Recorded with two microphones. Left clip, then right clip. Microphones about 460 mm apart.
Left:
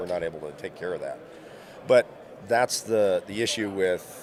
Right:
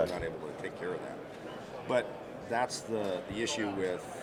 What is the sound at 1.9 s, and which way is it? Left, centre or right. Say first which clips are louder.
Speech: left 12 dB; left.